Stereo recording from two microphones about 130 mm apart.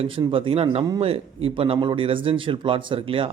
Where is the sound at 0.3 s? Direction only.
45° right (ahead or behind).